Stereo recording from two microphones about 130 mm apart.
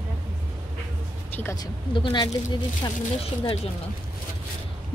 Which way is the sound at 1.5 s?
35° left (ahead or behind).